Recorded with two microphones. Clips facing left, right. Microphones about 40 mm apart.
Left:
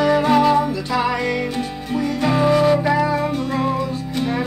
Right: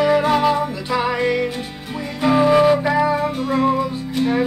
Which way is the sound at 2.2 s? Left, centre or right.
Centre.